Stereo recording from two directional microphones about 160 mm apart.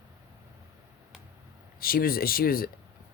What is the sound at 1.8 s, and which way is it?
Speech, 65° left (ahead or behind).